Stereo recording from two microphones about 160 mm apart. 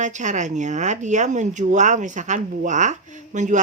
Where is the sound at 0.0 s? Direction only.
50° right (ahead or behind).